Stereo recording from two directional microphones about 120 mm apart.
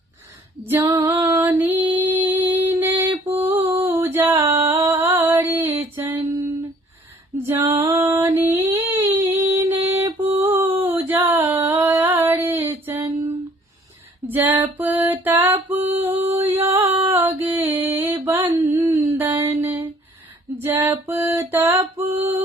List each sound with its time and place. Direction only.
0.6 s female singing: 20° right (ahead or behind)
1.1 s music: 20° right (ahead or behind)
3.2 s a sound: 20° right (ahead or behind)
7.4 s female singing: 25° right (ahead or behind)
9.8 s music: 20° right (ahead or behind)
10.8 s a sound: 15° right (ahead or behind)
14.3 s music: 15° right (ahead or behind)
18.4 s a sound: 25° right (ahead or behind)
19.1 s music: 15° right (ahead or behind)
20.7 s female singing: 20° right (ahead or behind)